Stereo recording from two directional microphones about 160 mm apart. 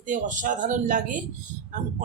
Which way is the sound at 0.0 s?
50° right (ahead or behind).